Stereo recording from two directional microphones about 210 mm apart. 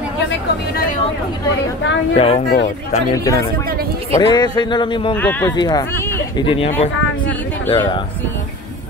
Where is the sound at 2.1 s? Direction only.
30° left (ahead or behind).